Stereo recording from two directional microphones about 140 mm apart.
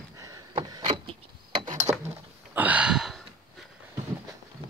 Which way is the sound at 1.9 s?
25° right (ahead or behind).